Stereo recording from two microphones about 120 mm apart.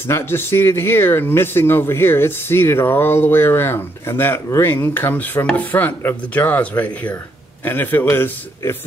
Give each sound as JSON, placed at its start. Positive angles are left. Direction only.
{"t": 0.0, "sound": "speech", "side_deg": 20}